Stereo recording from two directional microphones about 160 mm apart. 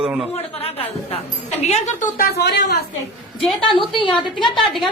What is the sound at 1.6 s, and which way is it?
Speech, 45° left (ahead or behind).